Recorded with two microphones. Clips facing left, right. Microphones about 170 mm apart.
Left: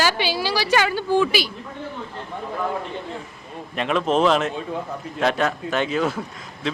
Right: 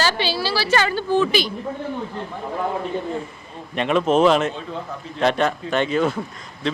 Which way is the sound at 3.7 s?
Centre (ahead or behind).